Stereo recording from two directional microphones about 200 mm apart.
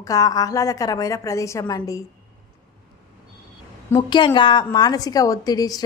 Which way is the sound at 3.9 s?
25° left (ahead or behind).